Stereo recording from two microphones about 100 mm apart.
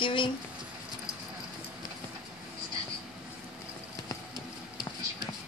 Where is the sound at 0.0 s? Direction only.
55° left (ahead or behind).